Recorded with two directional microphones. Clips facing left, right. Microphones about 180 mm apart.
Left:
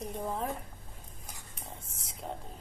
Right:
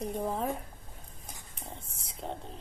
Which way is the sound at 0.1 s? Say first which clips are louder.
Right 1 dB; centre (ahead or behind).